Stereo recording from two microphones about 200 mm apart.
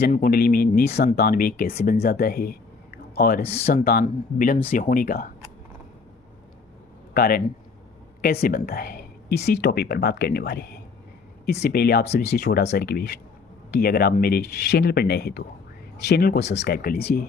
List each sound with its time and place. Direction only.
0.1 s speech: 45° left (ahead or behind)
7.1 s speech: 50° left (ahead or behind)